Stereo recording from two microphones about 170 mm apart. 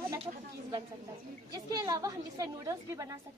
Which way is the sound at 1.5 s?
25° right (ahead or behind).